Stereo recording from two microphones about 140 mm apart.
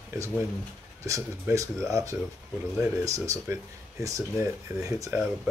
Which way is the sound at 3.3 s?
25° right (ahead or behind).